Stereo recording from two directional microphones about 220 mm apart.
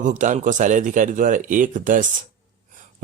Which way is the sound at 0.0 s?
35° right (ahead or behind).